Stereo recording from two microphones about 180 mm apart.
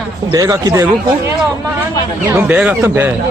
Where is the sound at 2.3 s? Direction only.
10° right (ahead or behind).